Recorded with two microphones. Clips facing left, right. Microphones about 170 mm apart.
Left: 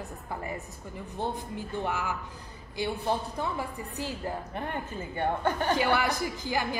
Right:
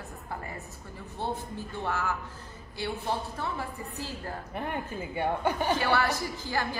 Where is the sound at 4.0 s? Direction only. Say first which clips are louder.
Left 5 dB; 15° left (ahead or behind).